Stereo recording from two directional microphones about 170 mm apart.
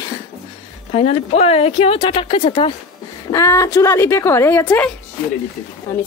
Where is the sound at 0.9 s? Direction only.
40° left (ahead or behind).